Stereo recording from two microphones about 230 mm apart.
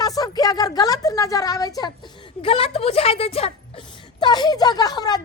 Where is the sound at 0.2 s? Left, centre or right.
Centre.